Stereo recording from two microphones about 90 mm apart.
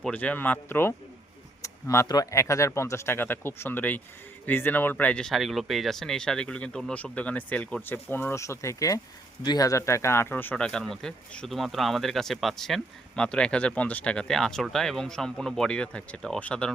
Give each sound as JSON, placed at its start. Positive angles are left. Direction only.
{"t": 0.1, "sound": "speech", "side_deg": 15}
{"t": 1.6, "sound": "a sound", "side_deg": 30}
{"t": 2.0, "sound": "speech", "side_deg": 45}
{"t": 2.3, "sound": "speech", "side_deg": 35}
{"t": 5.3, "sound": "speech", "side_deg": 0}
{"t": 8.4, "sound": "speech", "side_deg": 35}
{"t": 9.4, "sound": "speech", "side_deg": 50}
{"t": 10.3, "sound": "speech", "side_deg": 15}